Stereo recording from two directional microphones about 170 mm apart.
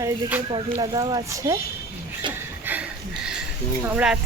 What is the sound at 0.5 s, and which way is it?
Speech, 25° right (ahead or behind).